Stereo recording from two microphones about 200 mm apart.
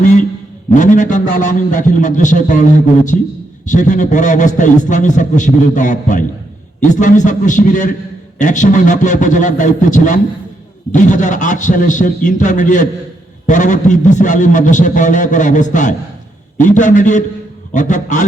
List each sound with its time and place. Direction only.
0.0 s a man's voice: 40° left (ahead or behind)